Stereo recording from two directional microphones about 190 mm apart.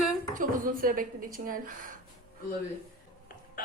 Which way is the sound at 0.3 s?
45° right (ahead or behind).